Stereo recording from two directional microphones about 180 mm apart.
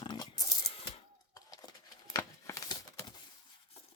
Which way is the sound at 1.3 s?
20° left (ahead or behind).